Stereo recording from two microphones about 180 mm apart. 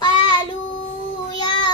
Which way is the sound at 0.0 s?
25° left (ahead or behind).